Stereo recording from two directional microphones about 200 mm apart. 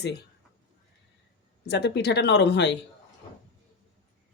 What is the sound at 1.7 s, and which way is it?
Speech, 55° left (ahead or behind).